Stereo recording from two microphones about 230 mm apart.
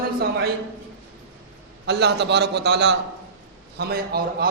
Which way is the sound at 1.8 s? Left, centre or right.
Right.